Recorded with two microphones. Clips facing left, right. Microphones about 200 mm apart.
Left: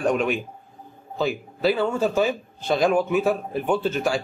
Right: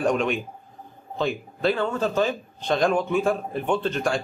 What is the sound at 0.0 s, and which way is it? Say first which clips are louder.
A man's voice: left 1 dB; 5° left (ahead or behind).